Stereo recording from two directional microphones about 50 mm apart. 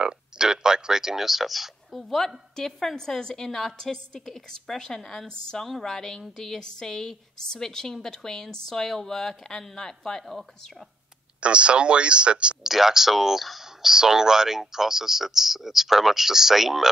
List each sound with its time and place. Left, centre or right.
0.0 s a woman's voice: centre
11.4 s speech: right
12.6 s speech: centre